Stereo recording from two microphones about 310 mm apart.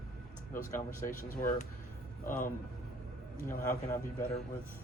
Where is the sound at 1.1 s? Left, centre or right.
Left.